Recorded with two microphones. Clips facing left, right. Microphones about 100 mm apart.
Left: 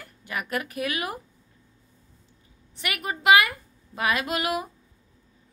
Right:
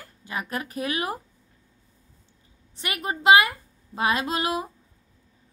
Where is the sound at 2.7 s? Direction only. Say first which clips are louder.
Right 1 dB; 30° right (ahead or behind).